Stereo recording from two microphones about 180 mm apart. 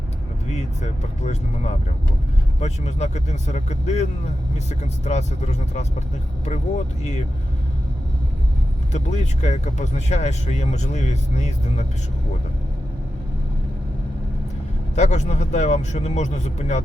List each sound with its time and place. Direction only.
0.5 s speech: 40° left (ahead or behind)
8.9 s speech: 40° left (ahead or behind)
14.9 s speech: 40° left (ahead or behind)